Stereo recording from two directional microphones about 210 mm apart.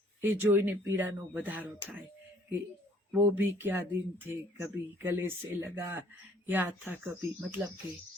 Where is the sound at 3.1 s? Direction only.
10° right (ahead or behind).